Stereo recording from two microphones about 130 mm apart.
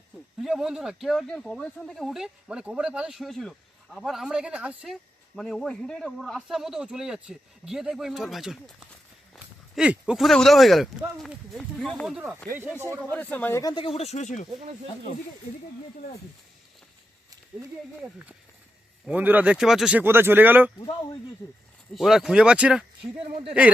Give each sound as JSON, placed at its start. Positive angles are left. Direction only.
{"t": 0.4, "sound": "speech", "side_deg": -5}
{"t": 5.4, "sound": "speech", "side_deg": 5}
{"t": 9.7, "sound": "speech", "side_deg": -5}
{"t": 12.0, "sound": "speech", "side_deg": -10}
{"t": 13.0, "sound": "speech", "side_deg": 10}
{"t": 13.6, "sound": "speech", "side_deg": 30}
{"t": 13.8, "sound": "speech", "side_deg": 50}
{"t": 19.0, "sound": "speech", "side_deg": -10}
{"t": 20.0, "sound": "speech", "side_deg": -15}
{"t": 21.9, "sound": "speech", "side_deg": 0}